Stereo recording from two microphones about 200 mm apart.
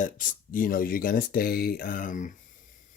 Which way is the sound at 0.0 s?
40° left (ahead or behind).